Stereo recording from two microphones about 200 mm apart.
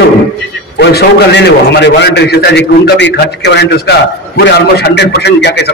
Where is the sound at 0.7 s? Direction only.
55° left (ahead or behind).